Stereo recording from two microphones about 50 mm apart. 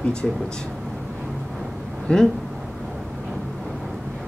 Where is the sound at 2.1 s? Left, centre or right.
Left.